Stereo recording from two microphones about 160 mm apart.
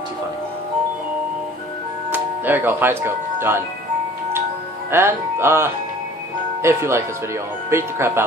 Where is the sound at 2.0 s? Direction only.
10° right (ahead or behind).